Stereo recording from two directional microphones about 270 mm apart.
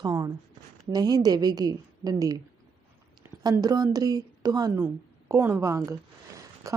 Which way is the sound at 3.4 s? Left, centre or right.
Centre.